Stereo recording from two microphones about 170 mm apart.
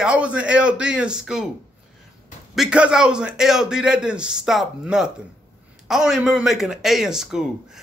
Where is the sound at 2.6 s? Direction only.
5° right (ahead or behind).